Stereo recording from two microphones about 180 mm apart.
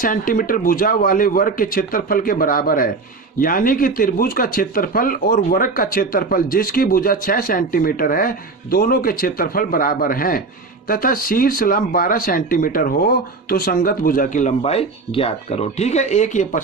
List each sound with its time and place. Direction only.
0.0 s speech: 50° left (ahead or behind)